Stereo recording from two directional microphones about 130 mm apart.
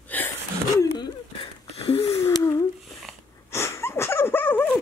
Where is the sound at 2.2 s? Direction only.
25° left (ahead or behind).